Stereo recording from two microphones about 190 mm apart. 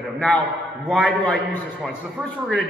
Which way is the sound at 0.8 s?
5° left (ahead or behind).